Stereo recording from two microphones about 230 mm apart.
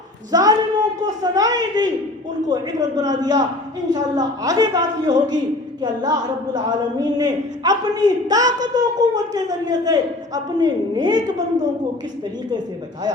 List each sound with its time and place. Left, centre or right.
0.3 s a man's voice: centre